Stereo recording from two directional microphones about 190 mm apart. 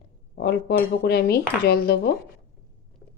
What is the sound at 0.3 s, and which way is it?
Speech, 60° left (ahead or behind).